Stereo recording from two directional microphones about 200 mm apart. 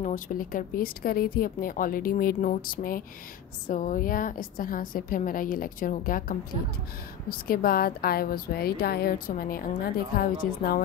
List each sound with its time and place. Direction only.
0.0 s a woman's voice: 40° left (ahead or behind)